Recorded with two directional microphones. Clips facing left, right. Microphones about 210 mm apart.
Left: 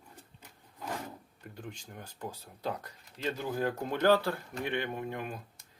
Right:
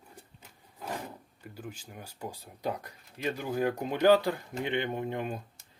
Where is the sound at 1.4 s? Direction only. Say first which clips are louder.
Right 2 dB; 5° right (ahead or behind); by 5.4 s 25° right (ahead or behind).